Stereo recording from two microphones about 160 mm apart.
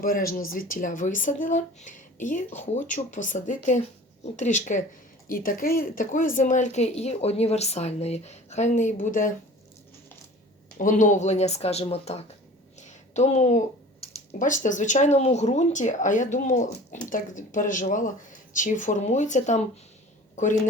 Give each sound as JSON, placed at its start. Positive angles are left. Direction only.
{"t": 0.0, "sound": "speech", "side_deg": 65}
{"t": 10.8, "sound": "speech", "side_deg": 50}
{"t": 12.8, "sound": "a sound", "side_deg": 45}
{"t": 14.3, "sound": "speech", "side_deg": 50}